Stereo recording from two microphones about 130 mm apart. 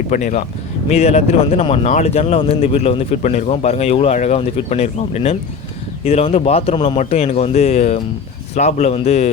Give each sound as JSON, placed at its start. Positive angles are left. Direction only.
{"t": 0.1, "sound": "speech", "side_deg": 75}
{"t": 0.9, "sound": "a man's voice", "side_deg": 55}
{"t": 7.0, "sound": "speech", "side_deg": 60}